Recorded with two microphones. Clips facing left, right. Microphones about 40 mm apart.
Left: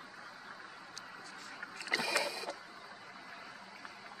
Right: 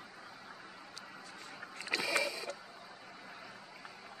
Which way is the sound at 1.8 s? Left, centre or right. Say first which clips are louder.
Even; right.